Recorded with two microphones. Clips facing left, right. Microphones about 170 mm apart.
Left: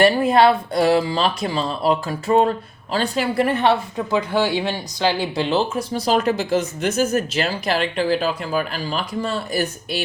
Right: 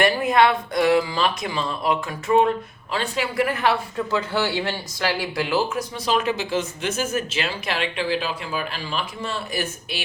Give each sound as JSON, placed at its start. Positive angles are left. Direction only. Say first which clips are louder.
{"t": 0.0, "sound": "speech", "louder": "left 4 dB", "side_deg": 30}
{"t": 6.1, "sound": "speech", "louder": "left 4 dB", "side_deg": 40}